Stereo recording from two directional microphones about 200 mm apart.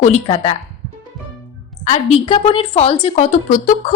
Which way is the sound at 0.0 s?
35° left (ahead or behind).